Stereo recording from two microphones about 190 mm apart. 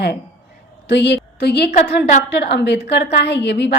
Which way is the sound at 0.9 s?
65° left (ahead or behind).